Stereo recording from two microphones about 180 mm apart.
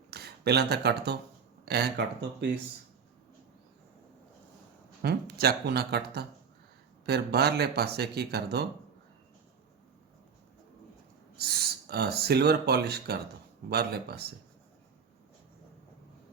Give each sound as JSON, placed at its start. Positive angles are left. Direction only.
{"t": 0.1, "sound": "speech", "side_deg": -65}
{"t": 5.0, "sound": "speech", "side_deg": -60}
{"t": 11.3, "sound": "speech", "side_deg": -60}